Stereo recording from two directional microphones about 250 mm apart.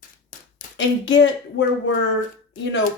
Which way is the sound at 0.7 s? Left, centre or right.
Left.